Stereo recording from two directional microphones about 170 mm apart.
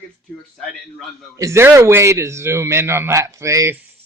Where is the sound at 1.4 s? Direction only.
15° right (ahead or behind).